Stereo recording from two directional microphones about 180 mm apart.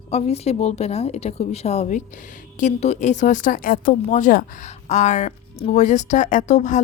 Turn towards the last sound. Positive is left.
turn(degrees=40)  # may be behind; listen again after turning